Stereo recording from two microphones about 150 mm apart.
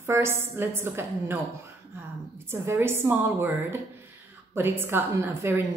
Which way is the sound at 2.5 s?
15° right (ahead or behind).